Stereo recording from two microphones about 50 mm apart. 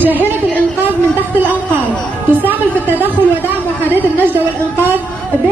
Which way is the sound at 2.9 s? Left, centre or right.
Right.